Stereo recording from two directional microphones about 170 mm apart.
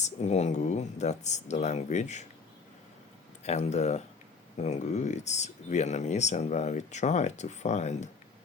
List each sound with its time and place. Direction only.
0.0 s speech: 40° left (ahead or behind)
3.4 s speech: 40° left (ahead or behind)